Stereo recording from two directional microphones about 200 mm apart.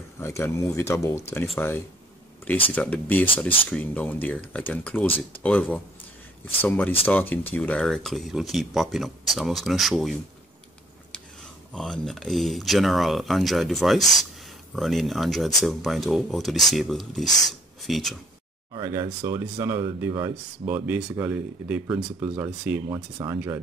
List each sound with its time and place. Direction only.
0.2 s speech: 15° left (ahead or behind)
2.7 s speech: 10° left (ahead or behind)
11.7 s speech: 5° left (ahead or behind)
18.7 s speech: 20° right (ahead or behind)
22.8 s speech: 20° right (ahead or behind)